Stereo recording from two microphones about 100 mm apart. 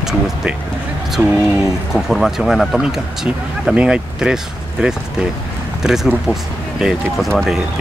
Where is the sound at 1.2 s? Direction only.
25° right (ahead or behind).